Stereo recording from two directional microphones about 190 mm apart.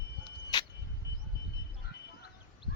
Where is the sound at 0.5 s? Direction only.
20° left (ahead or behind).